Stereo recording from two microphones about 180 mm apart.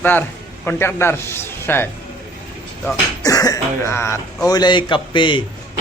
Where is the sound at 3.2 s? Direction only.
20° left (ahead or behind).